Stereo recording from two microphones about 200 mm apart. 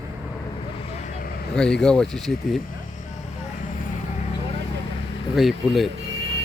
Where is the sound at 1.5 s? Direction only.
5° left (ahead or behind).